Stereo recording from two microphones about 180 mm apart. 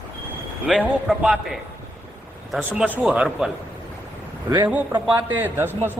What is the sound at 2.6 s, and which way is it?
Speech, 10° right (ahead or behind).